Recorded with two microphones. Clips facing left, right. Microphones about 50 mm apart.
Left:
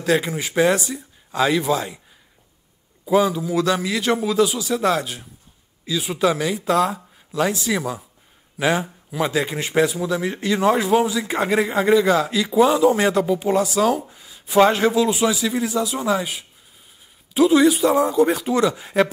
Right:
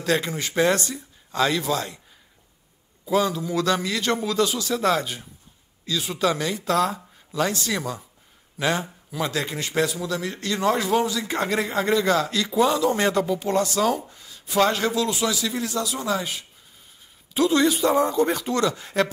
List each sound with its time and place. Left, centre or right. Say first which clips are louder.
0.0 s a man's voice: left 4 dB; centre
3.1 s a man's voice: left 4 dB; centre